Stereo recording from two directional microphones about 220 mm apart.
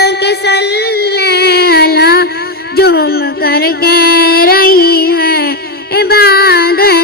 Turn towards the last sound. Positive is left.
turn(degrees=45)  # may be behind; listen again after turning